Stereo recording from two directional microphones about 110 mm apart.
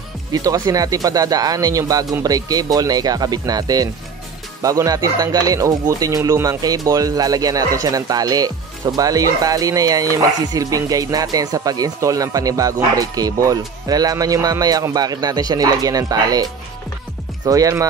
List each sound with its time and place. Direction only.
0.3 s speech: 30° right (ahead or behind)
17.5 s speech: 30° right (ahead or behind)